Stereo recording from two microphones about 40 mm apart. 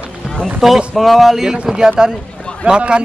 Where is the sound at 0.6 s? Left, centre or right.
Centre.